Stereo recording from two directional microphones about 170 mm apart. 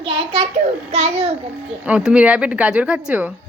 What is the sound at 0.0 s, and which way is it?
A child's voice, 30° right (ahead or behind).